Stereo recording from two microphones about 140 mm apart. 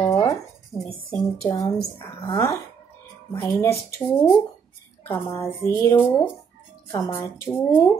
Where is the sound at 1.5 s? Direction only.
25° left (ahead or behind).